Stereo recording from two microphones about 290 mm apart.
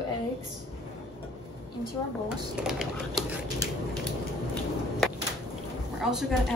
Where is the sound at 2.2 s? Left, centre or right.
Centre.